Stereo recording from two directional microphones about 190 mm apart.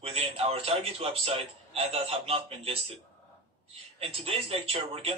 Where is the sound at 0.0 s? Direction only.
30° right (ahead or behind).